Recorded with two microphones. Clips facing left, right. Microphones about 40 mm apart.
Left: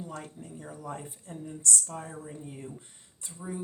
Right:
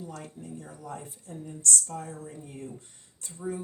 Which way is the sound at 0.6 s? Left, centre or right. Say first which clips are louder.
Left 5 dB; left.